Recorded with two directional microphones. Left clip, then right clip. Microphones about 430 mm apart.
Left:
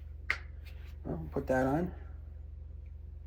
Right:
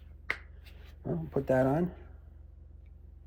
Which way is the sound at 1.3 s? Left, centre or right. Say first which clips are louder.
Right 3 dB; right.